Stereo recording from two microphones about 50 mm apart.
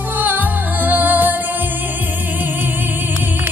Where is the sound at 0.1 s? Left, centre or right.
Right.